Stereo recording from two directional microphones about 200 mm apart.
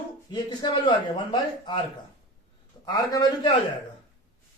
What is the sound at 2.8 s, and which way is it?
Speech, 20° left (ahead or behind).